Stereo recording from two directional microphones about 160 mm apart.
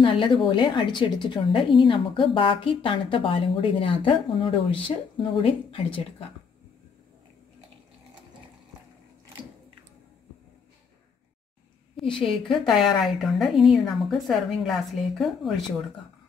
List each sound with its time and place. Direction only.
0.0 s a woman's voice: 30° left (ahead or behind)
12.0 s a woman's voice: 5° left (ahead or behind)